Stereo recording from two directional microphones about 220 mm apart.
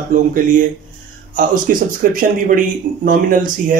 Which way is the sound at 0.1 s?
35° right (ahead or behind).